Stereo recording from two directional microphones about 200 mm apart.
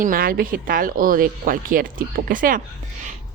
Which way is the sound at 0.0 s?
45° right (ahead or behind).